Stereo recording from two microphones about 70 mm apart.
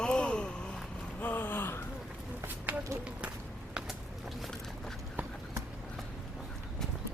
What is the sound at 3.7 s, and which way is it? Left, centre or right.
Vehicle, centre.